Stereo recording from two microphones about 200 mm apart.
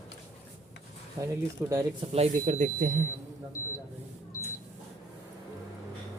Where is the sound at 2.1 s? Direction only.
35° right (ahead or behind).